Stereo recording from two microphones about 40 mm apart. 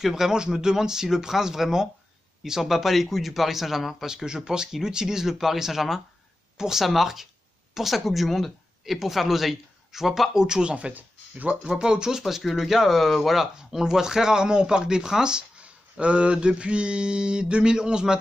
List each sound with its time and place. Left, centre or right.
0.0 s speech: centre
4.1 s speech: centre
6.5 s speech: centre
6.8 s speech: centre
10.3 s a sound: centre
10.9 s speech: right
11.6 s speech: centre
12.2 s speech: centre
15.6 s a sound: right